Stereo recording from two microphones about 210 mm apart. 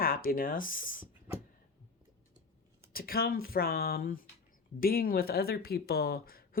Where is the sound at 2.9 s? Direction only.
45° left (ahead or behind).